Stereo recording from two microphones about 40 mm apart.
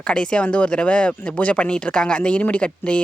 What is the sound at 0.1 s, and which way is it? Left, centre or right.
Speech, left.